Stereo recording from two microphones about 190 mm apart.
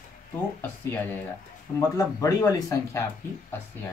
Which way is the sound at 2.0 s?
15° left (ahead or behind).